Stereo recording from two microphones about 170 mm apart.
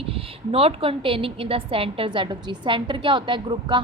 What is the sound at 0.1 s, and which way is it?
A woman's voice, 35° right (ahead or behind).